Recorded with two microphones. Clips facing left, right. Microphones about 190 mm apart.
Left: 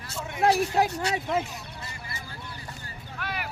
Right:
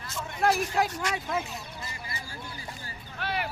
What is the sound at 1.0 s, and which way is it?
Speech, 35° left (ahead or behind).